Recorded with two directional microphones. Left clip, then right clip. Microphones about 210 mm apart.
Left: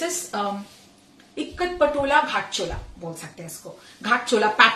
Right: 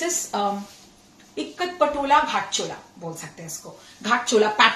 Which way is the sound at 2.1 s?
15° left (ahead or behind).